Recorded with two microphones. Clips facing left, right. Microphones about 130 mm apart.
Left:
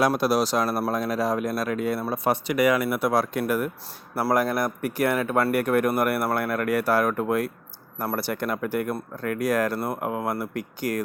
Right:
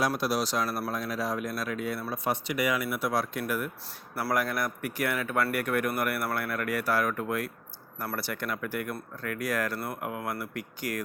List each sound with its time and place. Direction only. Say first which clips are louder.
0.0 s speech: left 6 dB; 70° left (ahead or behind); by 3.7 s 50° left (ahead or behind)
4.1 s speech: left 6 dB; 40° left (ahead or behind)